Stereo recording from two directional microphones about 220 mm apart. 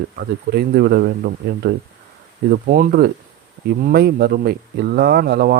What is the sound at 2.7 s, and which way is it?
Speech, 45° right (ahead or behind).